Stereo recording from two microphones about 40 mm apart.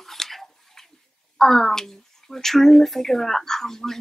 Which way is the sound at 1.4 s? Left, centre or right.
Centre.